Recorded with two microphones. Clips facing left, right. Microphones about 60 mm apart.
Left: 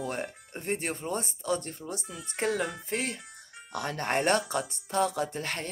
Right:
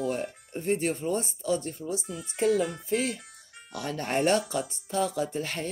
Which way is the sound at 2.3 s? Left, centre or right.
Left.